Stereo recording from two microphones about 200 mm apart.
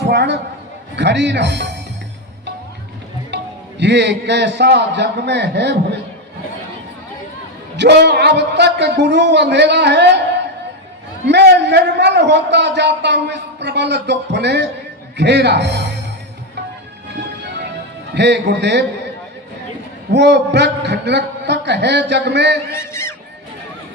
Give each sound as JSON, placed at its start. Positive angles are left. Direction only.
{"t": 0.0, "sound": "a sound", "side_deg": -60}
{"t": 0.9, "sound": "a man's voice", "side_deg": -60}
{"t": 3.3, "sound": "a man's voice", "side_deg": -60}
{"t": 7.8, "sound": "a man's voice", "side_deg": -55}
{"t": 11.3, "sound": "a man's voice", "side_deg": -60}
{"t": 18.1, "sound": "a man's voice", "side_deg": -60}
{"t": 20.1, "sound": "a man's voice", "side_deg": -60}
{"t": 22.7, "sound": "speech", "side_deg": 15}